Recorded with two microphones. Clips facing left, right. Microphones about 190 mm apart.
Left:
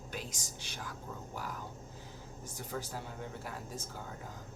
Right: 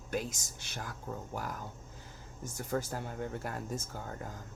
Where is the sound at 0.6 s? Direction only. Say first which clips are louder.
Right 4 dB; 45° right (ahead or behind).